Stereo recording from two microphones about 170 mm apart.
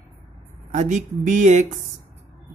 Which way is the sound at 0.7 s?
45° right (ahead or behind).